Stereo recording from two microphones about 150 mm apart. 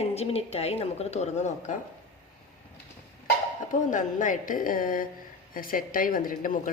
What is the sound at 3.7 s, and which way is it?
A woman's voice, 60° left (ahead or behind).